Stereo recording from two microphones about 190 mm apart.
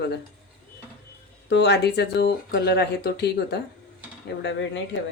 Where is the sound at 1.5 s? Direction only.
65° left (ahead or behind).